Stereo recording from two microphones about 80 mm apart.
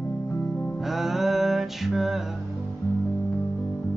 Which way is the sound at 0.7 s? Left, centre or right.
Centre.